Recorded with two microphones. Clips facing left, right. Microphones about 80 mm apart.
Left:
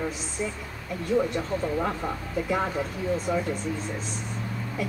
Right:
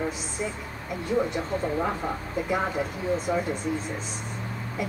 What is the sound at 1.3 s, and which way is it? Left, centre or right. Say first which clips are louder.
Speech: even; centre.